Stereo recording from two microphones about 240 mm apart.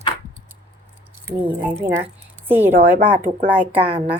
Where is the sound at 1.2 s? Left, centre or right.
Centre.